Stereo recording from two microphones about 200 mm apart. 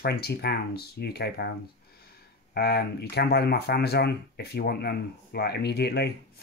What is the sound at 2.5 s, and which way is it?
Speech, 50° left (ahead or behind).